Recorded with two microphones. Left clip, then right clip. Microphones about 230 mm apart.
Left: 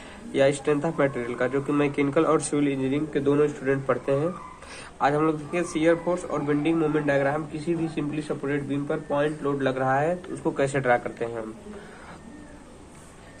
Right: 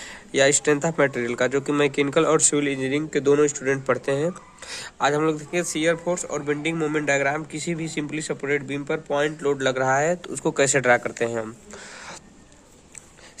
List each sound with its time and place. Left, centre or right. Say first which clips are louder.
0.3 s a man's voice: right 3 dB; right